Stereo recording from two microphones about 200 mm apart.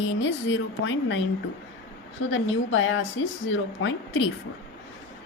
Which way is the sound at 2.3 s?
75° left (ahead or behind).